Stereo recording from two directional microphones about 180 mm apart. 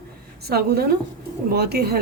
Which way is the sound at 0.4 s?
60° right (ahead or behind).